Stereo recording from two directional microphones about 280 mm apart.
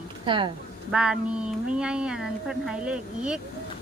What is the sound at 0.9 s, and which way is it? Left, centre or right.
Speech, centre.